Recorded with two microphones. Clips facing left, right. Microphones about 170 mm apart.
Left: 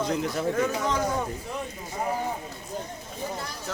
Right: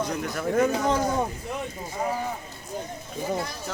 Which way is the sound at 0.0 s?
25° left (ahead or behind).